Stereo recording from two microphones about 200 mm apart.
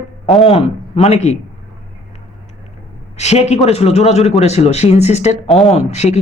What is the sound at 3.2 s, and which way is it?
Speech, 35° left (ahead or behind).